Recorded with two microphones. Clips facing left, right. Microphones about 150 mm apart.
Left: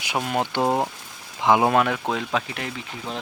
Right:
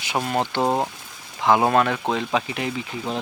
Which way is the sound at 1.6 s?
5° left (ahead or behind).